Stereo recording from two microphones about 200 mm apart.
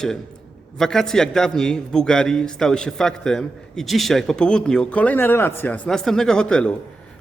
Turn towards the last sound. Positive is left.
turn(degrees=5)  # may be behind; listen again after turning